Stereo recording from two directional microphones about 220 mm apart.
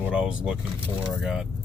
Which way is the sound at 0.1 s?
5° right (ahead or behind).